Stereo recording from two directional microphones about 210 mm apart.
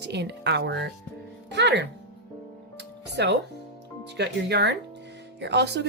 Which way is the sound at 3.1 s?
55° right (ahead or behind).